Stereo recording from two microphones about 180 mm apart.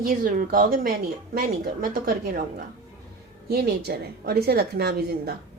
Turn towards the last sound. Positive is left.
turn(degrees=-60)  # may be behind; listen again after turning